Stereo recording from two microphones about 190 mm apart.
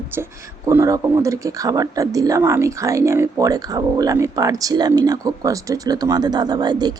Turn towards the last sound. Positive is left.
turn(degrees=-20)  # may be behind; listen again after turning